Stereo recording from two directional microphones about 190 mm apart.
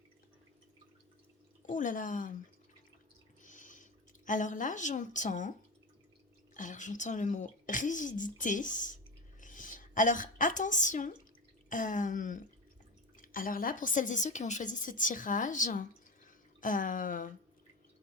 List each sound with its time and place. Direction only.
1.6 s speech: 45° left (ahead or behind)
3.4 s a sound: 40° left (ahead or behind)
4.3 s a woman's voice: 40° left (ahead or behind)